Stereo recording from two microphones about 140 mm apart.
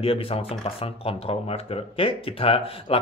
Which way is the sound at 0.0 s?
45° left (ahead or behind).